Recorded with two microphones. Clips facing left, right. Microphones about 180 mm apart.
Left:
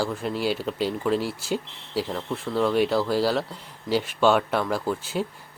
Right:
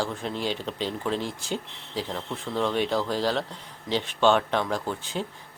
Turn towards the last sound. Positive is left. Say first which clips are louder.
# left 4 dB
turn(degrees=5)  # may be behind; listen again after turning